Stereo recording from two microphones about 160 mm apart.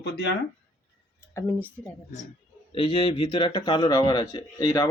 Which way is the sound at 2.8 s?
35° left (ahead or behind).